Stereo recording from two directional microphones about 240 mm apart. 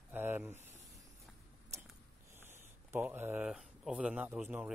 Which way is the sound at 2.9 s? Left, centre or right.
Centre.